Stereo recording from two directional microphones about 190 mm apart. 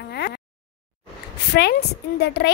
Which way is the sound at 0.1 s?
60° left (ahead or behind).